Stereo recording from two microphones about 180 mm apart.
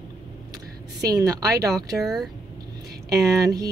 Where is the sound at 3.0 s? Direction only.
20° right (ahead or behind).